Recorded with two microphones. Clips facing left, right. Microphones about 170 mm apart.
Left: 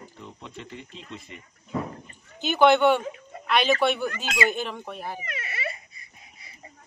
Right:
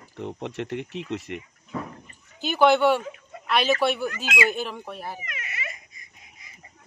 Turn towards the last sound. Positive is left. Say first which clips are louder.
# left 1 dB
turn(degrees=30)  # may be behind; listen again after turning